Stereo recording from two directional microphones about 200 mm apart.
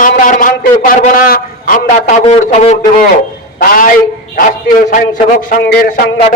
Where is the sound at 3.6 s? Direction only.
45° left (ahead or behind).